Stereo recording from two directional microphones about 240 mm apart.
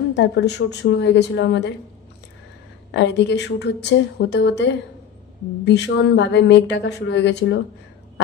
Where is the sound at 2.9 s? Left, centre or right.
Left.